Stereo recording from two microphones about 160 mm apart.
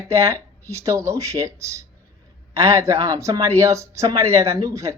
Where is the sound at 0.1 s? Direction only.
15° right (ahead or behind).